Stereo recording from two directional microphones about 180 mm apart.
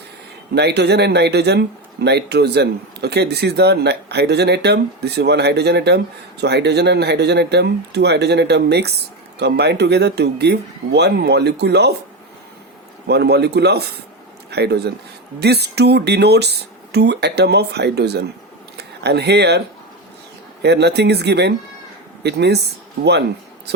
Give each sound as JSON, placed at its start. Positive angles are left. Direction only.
{"t": 0.5, "sound": "speech", "side_deg": -70}
{"t": 13.1, "sound": "speech", "side_deg": -65}